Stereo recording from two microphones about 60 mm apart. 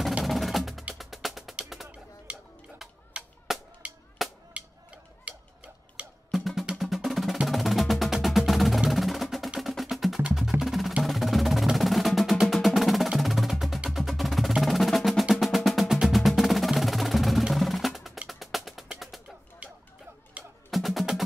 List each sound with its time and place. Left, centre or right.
0.2 s percussion: centre
0.9 s music: centre
2.3 s music: right
3.1 s honk: centre
3.8 s music: right
4.6 s a sound: right
6.3 s music: centre
6.8 s percussion: centre
8.1 s music: centre
12.6 s percussion: centre
13.2 s wood block: centre
13.8 s music: centre
19.6 s music: right
20.7 s music: centre